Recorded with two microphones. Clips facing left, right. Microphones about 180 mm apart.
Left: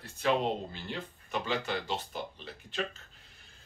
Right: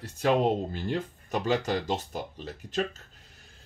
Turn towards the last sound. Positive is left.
turn(degrees=-40)  # may be behind; listen again after turning